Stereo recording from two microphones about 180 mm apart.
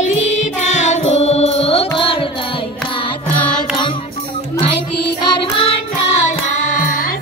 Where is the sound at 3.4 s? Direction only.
5° left (ahead or behind).